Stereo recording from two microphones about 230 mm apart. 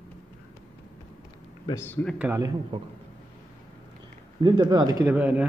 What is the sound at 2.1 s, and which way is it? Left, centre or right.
Speech, centre.